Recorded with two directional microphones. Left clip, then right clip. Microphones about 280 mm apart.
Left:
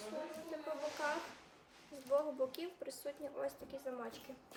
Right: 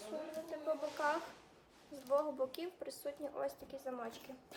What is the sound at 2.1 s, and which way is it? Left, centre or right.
A woman's voice, centre.